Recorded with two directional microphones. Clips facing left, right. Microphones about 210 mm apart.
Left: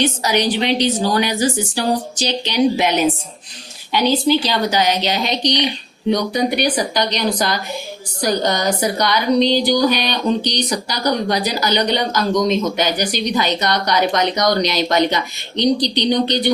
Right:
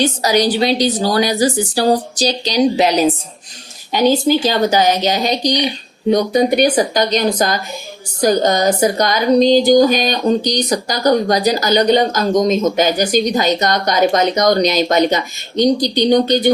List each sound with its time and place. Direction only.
0.0 s a woman's voice: 35° right (ahead or behind)
8.4 s speech: 45° right (ahead or behind)